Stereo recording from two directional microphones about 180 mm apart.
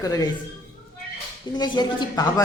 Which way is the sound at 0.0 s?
20° left (ahead or behind).